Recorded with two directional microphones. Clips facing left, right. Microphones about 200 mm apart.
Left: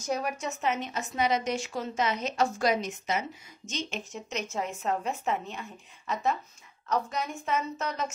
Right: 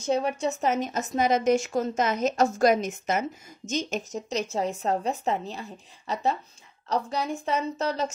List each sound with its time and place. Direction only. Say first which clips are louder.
0.0 s a woman's voice: right 6 dB; 25° right (ahead or behind)